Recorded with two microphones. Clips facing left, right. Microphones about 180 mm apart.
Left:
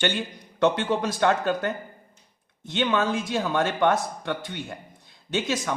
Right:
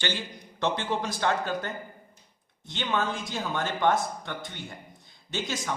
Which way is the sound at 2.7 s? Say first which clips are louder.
Left 6 dB; 65° left (ahead or behind).